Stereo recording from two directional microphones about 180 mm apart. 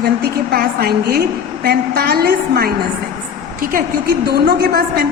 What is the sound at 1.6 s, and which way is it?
A woman's voice, 60° right (ahead or behind).